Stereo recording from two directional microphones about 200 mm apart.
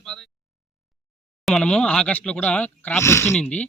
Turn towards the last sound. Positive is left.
turn(degrees=5)  # may be behind; listen again after turning